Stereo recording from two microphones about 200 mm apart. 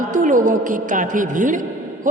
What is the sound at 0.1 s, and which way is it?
A man's voice, 40° right (ahead or behind).